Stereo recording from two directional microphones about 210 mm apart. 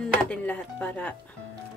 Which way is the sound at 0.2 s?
5° left (ahead or behind).